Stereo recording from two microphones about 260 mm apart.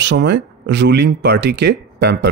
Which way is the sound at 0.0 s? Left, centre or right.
Right.